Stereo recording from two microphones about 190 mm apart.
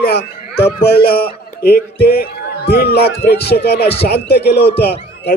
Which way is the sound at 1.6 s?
55° left (ahead or behind).